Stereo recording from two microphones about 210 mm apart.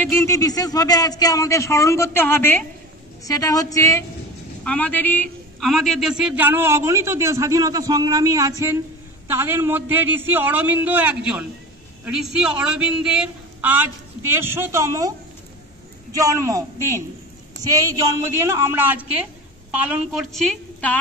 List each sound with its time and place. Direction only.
0.0 s a man's voice: 10° left (ahead or behind); by 15.1 s 15° right (ahead or behind)
16.2 s a man's voice: 15° right (ahead or behind); by 21.0 s 5° left (ahead or behind)